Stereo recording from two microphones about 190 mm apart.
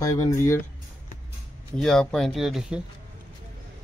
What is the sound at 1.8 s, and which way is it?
Speech, 5° left (ahead or behind).